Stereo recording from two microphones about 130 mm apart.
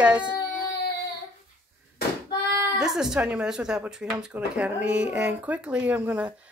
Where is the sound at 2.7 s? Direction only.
5° right (ahead or behind).